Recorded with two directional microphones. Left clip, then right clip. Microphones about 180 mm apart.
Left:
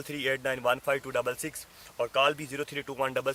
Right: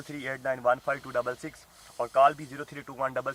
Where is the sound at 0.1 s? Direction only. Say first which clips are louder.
Left 2 dB; 40° left (ahead or behind).